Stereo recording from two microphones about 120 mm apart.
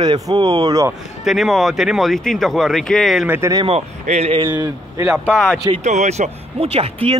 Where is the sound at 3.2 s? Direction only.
15° right (ahead or behind).